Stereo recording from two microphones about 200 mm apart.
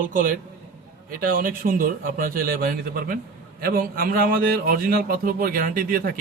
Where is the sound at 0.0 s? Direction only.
45° right (ahead or behind).